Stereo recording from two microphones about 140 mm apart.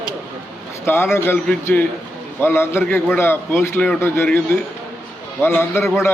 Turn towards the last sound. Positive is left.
turn(degrees=15)  # may be behind; listen again after turning